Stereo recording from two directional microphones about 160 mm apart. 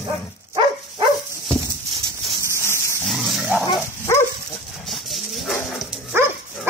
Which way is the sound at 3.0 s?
Centre (ahead or behind).